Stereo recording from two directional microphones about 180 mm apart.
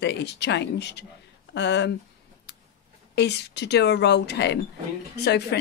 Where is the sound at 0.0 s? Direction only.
70° left (ahead or behind).